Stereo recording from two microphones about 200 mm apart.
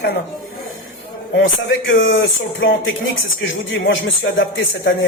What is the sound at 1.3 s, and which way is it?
A man's voice, 60° left (ahead or behind).